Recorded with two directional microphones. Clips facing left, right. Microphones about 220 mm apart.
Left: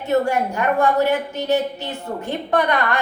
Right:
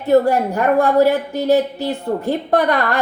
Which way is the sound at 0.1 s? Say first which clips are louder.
Right 5 dB; 35° right (ahead or behind).